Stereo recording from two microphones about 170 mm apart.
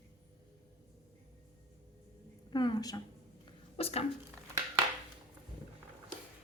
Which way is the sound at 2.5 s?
25° left (ahead or behind).